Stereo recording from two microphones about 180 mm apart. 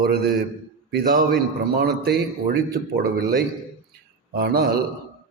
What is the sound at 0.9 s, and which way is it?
A man's voice, 50° right (ahead or behind).